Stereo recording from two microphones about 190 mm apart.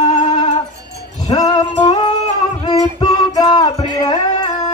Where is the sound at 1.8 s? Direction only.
25° left (ahead or behind).